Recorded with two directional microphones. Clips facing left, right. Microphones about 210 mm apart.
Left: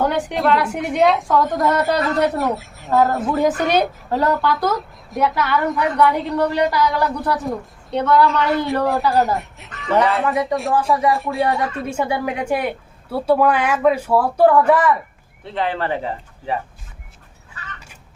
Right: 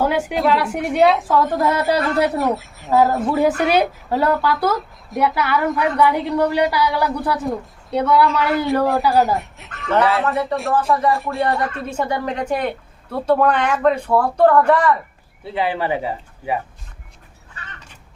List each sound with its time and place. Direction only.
0.0 s a woman's voice: 5° right (ahead or behind)
7.0 s a woman's voice: centre (ahead or behind)
10.5 s a woman's voice: 10° left (ahead or behind)
15.4 s speech: 10° right (ahead or behind)